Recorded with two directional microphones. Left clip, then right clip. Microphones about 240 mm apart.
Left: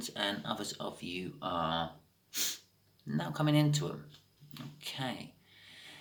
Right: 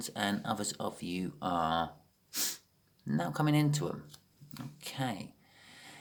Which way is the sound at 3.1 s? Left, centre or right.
Right.